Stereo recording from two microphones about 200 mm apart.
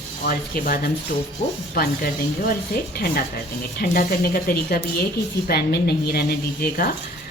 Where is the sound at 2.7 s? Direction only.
50° left (ahead or behind).